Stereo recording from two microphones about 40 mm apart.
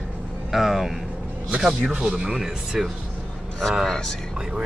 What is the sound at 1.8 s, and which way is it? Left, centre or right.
Speech, right.